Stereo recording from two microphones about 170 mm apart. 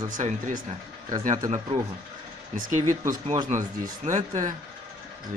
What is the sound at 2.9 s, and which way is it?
Speech, 45° right (ahead or behind).